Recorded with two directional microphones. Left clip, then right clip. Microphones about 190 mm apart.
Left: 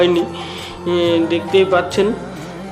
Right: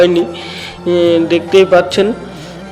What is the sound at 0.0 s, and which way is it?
Speech, 20° right (ahead or behind).